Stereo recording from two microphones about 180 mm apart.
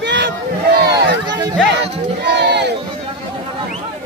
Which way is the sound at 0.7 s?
65° right (ahead or behind).